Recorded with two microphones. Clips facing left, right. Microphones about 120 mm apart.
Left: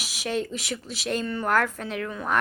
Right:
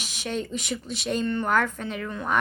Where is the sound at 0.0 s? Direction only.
5° left (ahead or behind).